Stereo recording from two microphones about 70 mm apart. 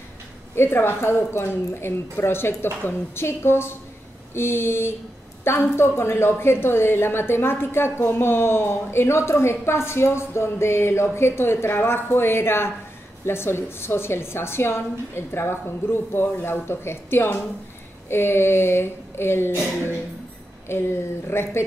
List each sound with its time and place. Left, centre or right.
0.6 s a woman's voice: left